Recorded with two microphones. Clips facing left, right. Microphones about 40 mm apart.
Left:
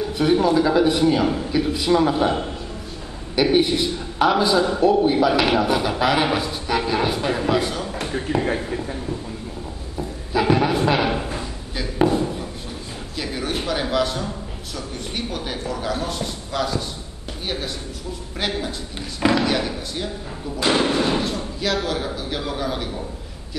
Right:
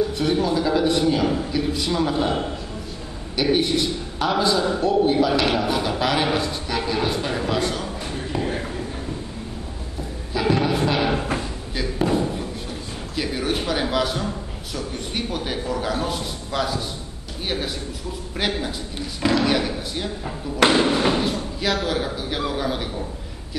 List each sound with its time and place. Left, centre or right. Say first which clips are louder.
0.2 s a man's voice: left 8 dB; centre
3.3 s a man's voice: left 2 dB; centre
10.3 s a man's voice: left 2 dB; centre
13.1 s a sound: right 2 dB; centre
15.1 s speech: right 2 dB; centre
18.9 s a man's voice: left 2 dB; centre
19.4 s speech: right 1 dB; centre
20.6 s speech: right 3 dB; right
21.2 s speech: right 1 dB; centre